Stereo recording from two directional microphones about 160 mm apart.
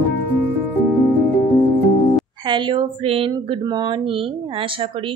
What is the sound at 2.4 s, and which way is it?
Speech, 30° right (ahead or behind).